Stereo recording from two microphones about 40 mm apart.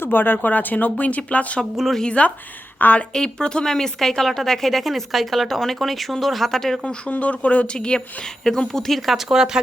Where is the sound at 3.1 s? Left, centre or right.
Centre.